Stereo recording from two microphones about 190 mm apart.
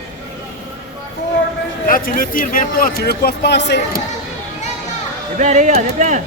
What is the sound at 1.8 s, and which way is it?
Speech, 45° left (ahead or behind).